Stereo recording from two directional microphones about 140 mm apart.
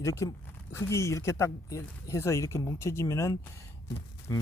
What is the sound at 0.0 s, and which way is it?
A man's voice, 20° left (ahead or behind).